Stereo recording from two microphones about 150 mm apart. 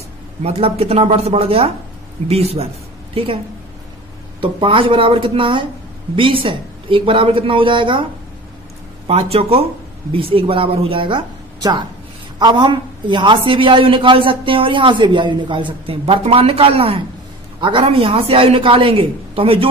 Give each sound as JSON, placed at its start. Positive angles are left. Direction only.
{"t": 0.4, "sound": "a man's voice", "side_deg": -45}
{"t": 4.4, "sound": "a man's voice", "side_deg": -35}